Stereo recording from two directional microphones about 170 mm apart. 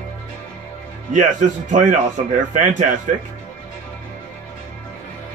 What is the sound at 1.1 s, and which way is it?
A man's voice, 45° right (ahead or behind).